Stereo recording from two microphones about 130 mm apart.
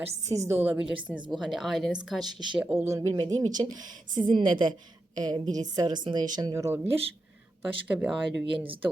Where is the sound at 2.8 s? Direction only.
25° right (ahead or behind).